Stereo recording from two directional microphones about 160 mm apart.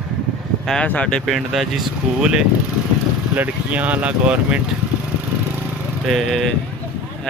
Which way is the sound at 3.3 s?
10° right (ahead or behind).